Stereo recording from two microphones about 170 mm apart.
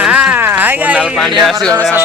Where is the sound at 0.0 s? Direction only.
5° right (ahead or behind).